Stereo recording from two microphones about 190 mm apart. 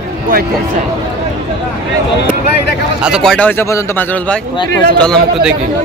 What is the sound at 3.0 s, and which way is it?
A man's voice, centre (ahead or behind).